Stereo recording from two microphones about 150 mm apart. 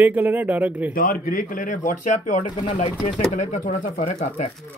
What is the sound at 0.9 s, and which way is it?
Speech, 75° left (ahead or behind).